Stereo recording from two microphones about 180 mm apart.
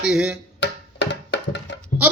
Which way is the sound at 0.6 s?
80° left.